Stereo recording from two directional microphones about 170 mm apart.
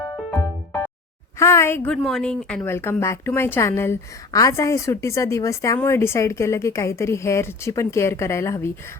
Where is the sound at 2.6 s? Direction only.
15° left (ahead or behind).